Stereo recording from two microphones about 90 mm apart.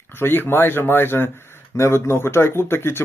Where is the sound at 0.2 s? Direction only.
25° left (ahead or behind).